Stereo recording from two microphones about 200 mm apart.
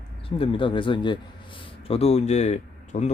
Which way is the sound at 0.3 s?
25° left (ahead or behind).